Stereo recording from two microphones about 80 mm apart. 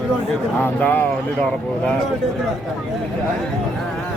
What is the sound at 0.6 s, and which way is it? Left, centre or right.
Speech, centre.